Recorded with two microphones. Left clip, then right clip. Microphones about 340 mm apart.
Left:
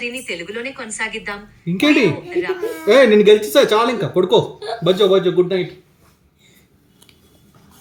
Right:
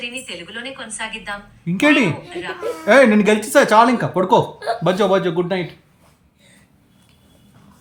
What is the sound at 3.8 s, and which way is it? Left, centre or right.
Speech, centre.